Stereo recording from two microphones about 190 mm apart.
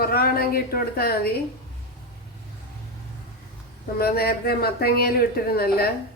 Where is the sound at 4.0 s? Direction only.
55° left (ahead or behind).